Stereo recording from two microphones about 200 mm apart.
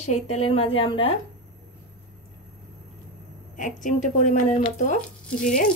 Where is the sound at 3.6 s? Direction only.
40° left (ahead or behind).